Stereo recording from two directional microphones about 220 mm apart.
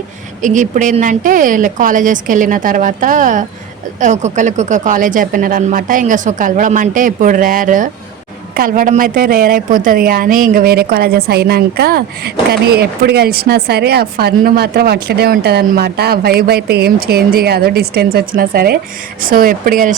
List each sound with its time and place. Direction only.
0.4 s speech: 35° right (ahead or behind)